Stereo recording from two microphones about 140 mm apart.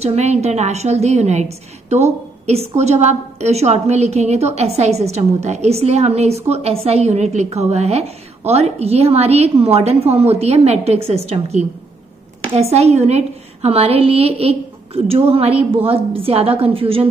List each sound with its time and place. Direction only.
0.0 s a woman's voice: 50° right (ahead or behind)